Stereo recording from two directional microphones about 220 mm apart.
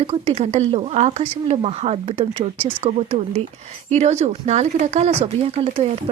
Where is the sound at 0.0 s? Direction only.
30° right (ahead or behind).